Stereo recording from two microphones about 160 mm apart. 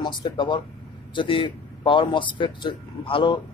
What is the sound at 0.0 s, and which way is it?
Speech, 30° left (ahead or behind).